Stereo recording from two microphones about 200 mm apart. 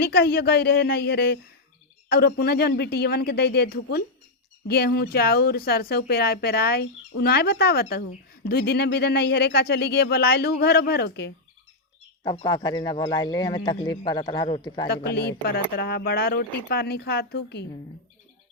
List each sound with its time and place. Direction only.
0.0 s speech: 50° left (ahead or behind)
12.2 s speech: 20° left (ahead or behind)
14.8 s speech: 50° left (ahead or behind)